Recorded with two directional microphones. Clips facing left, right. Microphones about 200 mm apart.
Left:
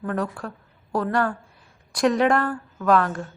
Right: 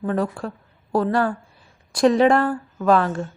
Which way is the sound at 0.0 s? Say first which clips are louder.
Right 4 dB; 30° right (ahead or behind).